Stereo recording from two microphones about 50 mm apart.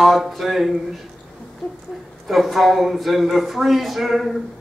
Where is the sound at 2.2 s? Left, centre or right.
Centre.